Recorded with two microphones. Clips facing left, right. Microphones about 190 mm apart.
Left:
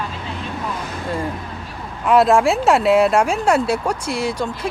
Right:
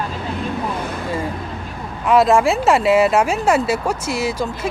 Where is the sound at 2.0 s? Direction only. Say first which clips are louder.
Even; centre (ahead or behind).